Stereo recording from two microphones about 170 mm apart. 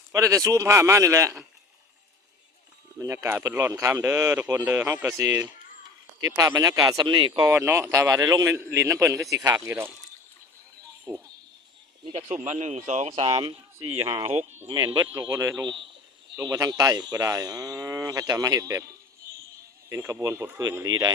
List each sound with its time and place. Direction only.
0.1 s speech: 20° right (ahead or behind)
3.0 s speech: 15° right (ahead or behind)
7.4 s speech: 15° right (ahead or behind)
11.1 s speech: 15° right (ahead or behind)
12.5 s speech: 40° right (ahead or behind); by 21.1 s 20° right (ahead or behind)